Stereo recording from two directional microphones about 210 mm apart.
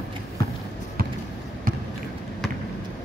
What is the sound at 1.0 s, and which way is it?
Basketball bounce, 45° right (ahead or behind).